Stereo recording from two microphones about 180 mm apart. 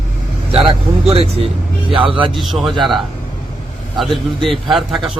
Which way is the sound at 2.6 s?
Centre (ahead or behind).